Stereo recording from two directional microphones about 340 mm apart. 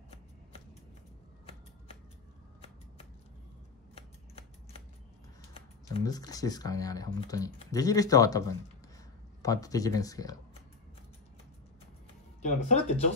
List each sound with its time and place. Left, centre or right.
3.9 s scissors: centre
5.5 s speech: centre
12.4 s speech: left